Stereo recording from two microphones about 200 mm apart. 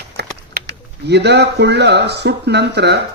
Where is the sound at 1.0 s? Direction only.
55° right (ahead or behind).